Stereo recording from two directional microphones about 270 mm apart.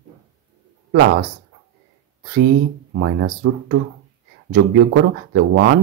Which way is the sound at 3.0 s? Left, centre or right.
Right.